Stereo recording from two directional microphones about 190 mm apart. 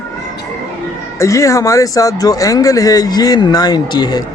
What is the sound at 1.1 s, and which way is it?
Speech, 15° left (ahead or behind).